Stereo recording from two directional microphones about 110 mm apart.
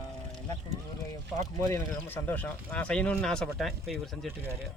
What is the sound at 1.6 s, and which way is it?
Speech, 30° left (ahead or behind).